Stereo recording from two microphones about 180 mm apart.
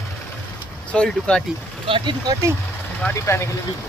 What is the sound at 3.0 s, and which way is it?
Speech, 15° left (ahead or behind).